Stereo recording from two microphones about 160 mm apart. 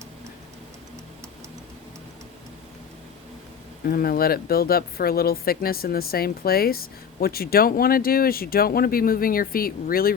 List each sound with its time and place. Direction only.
3.8 s speech: 65° left (ahead or behind)